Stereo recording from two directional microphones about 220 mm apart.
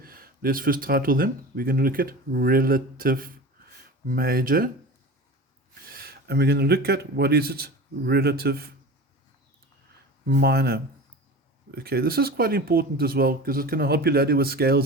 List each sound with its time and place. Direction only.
0.0 s speech: 40° right (ahead or behind)
5.8 s speech: 45° right (ahead or behind)
10.2 s speech: 45° right (ahead or behind)